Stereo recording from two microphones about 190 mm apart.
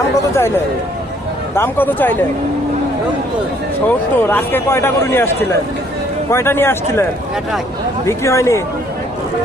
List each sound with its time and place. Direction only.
0.3 s a man's voice: 15° left (ahead or behind)
3.8 s a man's voice: 10° left (ahead or behind)
8.0 s a man's voice: 15° left (ahead or behind)